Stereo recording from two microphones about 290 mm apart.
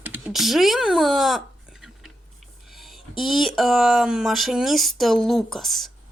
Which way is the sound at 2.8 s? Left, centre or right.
Centre.